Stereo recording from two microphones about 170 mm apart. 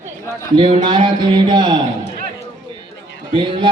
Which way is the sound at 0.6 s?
30° right (ahead or behind).